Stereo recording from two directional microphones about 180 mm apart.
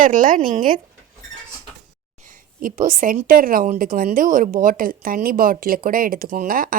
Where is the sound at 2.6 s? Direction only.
50° right (ahead or behind).